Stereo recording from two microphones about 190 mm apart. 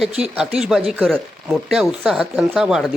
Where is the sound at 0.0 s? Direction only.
5° right (ahead or behind).